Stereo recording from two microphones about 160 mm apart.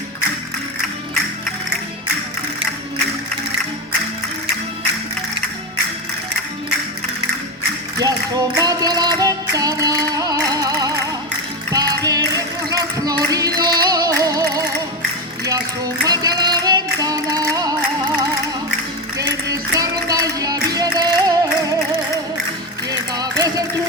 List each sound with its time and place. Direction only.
7.9 s music: 25° right (ahead or behind)
19.1 s music: 20° right (ahead or behind)
22.9 s music: 25° right (ahead or behind)